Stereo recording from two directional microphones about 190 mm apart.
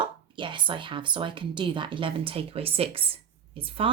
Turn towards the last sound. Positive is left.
turn(degrees=-30)  # may be behind; listen again after turning